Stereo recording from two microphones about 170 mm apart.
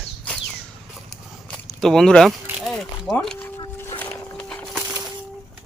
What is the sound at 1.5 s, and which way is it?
Speech, centre (ahead or behind).